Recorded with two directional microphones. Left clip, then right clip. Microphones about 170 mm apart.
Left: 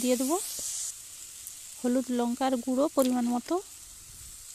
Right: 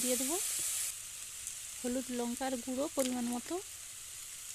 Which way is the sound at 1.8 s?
35° left (ahead or behind).